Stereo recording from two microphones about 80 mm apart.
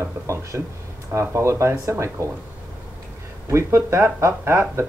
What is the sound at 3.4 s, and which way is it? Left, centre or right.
Speech, right.